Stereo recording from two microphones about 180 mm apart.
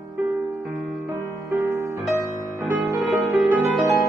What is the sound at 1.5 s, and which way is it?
Music, 15° right (ahead or behind).